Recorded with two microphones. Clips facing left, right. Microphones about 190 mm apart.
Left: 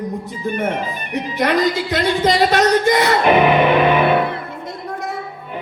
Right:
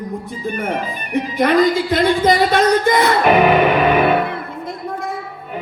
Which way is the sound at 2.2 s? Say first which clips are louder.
Right 1 dB; 55° right (ahead or behind).